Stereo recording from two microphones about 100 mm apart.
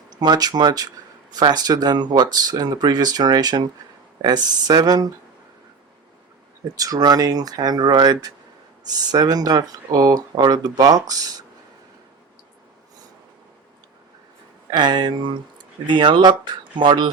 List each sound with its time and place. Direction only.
0.1 s speech: 45° right (ahead or behind)
6.7 s speech: 40° right (ahead or behind)
14.7 s speech: 50° right (ahead or behind)